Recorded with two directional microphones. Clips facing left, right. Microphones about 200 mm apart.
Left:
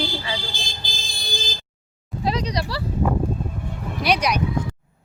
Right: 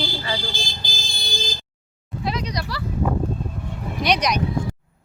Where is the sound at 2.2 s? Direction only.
35° left (ahead or behind).